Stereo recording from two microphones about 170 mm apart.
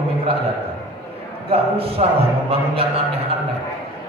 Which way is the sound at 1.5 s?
35° right (ahead or behind).